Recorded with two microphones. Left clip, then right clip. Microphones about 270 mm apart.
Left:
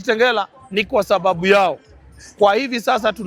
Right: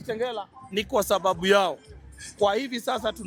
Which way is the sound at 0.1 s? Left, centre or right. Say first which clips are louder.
Left 13 dB; left.